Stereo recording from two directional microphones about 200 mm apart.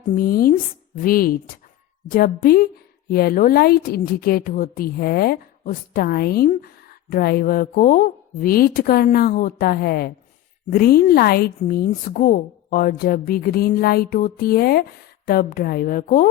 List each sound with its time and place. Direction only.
0.0 s a woman's voice: 40° left (ahead or behind)